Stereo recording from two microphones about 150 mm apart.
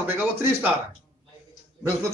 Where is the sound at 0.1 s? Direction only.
15° right (ahead or behind).